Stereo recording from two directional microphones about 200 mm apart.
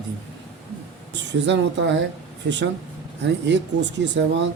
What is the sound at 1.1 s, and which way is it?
Speech, 60° right (ahead or behind).